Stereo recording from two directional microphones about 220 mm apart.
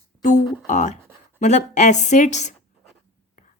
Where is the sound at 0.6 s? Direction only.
35° left (ahead or behind).